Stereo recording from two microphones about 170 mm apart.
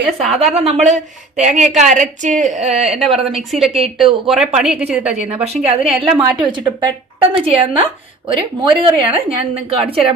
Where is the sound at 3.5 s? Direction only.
Centre (ahead or behind).